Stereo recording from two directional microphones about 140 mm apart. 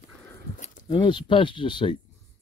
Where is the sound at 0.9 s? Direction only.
35° left (ahead or behind).